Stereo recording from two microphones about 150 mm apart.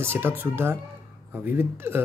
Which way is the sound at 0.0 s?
15° right (ahead or behind).